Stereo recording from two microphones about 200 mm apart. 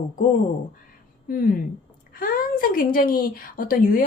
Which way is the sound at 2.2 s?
45° left (ahead or behind).